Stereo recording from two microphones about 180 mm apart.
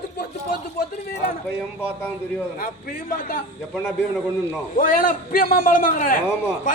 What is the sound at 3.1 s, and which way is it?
Speech, 55° left (ahead or behind).